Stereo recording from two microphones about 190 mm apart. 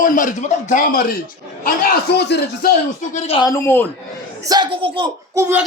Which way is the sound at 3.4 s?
15° left (ahead or behind).